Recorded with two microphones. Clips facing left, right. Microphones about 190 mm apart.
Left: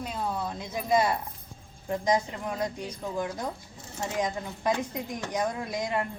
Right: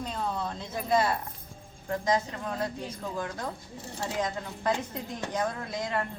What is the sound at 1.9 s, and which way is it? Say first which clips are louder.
Speech: left 1 dB; 15° left (ahead or behind).